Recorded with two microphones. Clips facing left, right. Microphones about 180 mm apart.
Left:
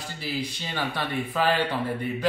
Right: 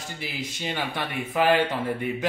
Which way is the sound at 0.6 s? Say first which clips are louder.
Right 4 dB; 20° right (ahead or behind).